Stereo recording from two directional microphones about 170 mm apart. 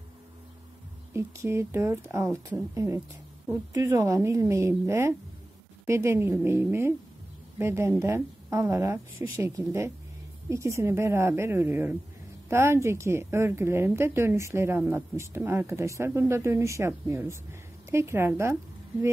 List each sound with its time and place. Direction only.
1.1 s speech: 15° right (ahead or behind)